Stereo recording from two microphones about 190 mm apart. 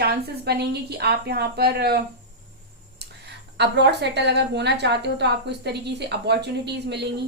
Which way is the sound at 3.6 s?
65° right (ahead or behind).